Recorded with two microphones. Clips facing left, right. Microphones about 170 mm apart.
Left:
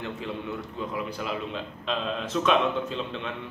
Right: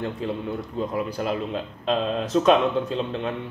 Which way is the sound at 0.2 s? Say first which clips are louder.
Right 5 dB; 40° right (ahead or behind).